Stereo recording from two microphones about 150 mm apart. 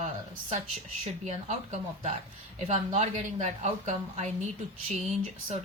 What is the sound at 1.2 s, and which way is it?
A woman's voice, 50° right (ahead or behind).